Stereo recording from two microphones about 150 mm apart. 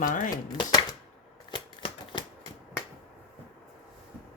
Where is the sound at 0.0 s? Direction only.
60° left (ahead or behind).